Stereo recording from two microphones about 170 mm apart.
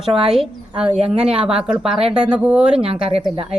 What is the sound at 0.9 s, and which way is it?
Speech, 35° right (ahead or behind).